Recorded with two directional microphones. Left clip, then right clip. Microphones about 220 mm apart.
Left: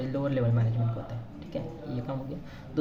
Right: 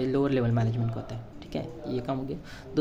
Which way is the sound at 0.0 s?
50° right (ahead or behind).